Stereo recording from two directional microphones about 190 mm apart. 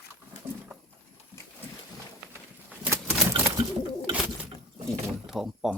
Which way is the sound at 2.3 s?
10° right (ahead or behind).